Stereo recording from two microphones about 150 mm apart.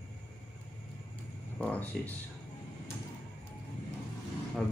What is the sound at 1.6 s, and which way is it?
Speech, 10° left (ahead or behind).